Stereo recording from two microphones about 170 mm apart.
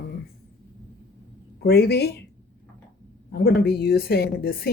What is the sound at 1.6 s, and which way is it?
Speech, 75° left (ahead or behind).